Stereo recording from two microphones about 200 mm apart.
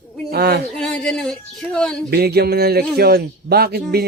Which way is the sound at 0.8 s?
5° left (ahead or behind).